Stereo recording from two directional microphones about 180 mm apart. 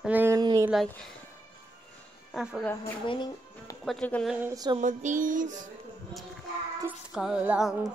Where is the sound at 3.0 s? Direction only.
25° left (ahead or behind).